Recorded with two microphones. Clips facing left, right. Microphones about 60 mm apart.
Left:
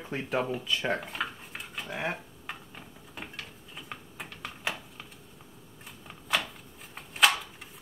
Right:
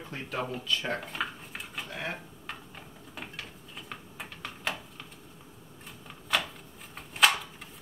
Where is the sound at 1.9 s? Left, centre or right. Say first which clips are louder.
Left 4 dB; centre.